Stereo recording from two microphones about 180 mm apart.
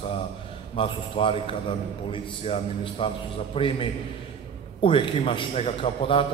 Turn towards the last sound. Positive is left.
turn(degrees=30)  # may be behind; listen again after turning